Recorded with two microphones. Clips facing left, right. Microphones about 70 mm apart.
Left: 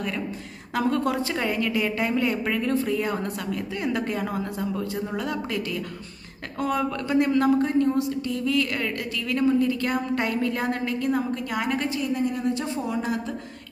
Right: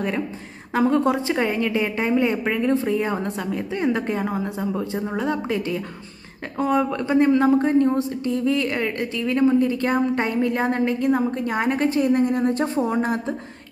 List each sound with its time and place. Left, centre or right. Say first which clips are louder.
0.7 s a woman's voice: right 5 dB; right